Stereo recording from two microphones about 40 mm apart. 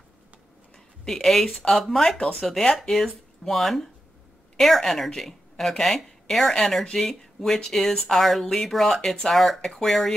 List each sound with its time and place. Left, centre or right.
1.0 s speech: centre
2.6 s speech: centre
2.9 s a woman's voice: centre
9.3 s speech: centre